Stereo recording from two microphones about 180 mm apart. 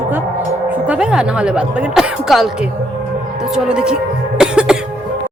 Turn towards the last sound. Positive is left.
turn(degrees=-5)  # may be behind; listen again after turning